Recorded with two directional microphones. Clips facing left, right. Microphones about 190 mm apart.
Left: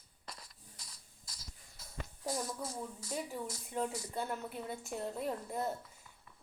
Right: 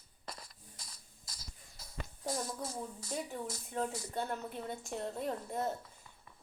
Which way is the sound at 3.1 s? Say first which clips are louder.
Even; 5° left (ahead or behind).